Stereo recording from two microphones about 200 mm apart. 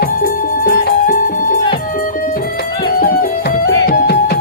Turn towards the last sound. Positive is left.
turn(degrees=50)  # may be behind; listen again after turning